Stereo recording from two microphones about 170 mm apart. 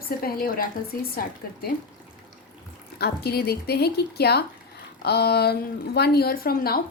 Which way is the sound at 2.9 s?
70° left (ahead or behind).